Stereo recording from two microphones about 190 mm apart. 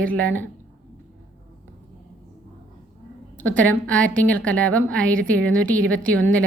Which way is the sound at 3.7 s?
5° left (ahead or behind).